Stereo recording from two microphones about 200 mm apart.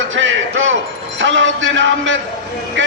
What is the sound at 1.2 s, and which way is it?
Speech, 70° right (ahead or behind).